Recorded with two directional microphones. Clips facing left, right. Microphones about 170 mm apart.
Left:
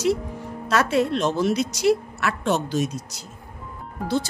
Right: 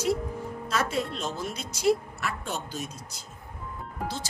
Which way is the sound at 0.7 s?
75° left (ahead or behind).